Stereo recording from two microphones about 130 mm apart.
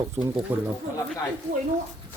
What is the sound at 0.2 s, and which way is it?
Speech, 25° right (ahead or behind).